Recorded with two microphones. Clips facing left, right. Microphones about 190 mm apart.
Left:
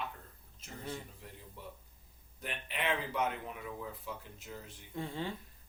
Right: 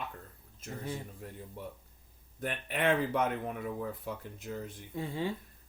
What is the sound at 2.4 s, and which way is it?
Speech, 50° right (ahead or behind).